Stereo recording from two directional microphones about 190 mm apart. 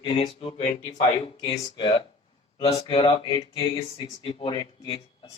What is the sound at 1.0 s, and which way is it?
Speech, 40° left (ahead or behind).